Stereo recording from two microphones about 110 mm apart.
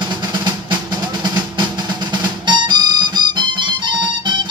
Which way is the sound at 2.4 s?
45° right (ahead or behind).